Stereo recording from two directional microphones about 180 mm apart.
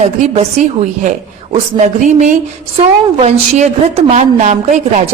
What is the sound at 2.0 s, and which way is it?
A woman's voice, 40° right (ahead or behind).